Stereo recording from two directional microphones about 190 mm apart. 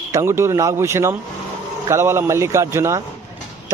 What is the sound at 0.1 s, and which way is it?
Speech, 15° right (ahead or behind).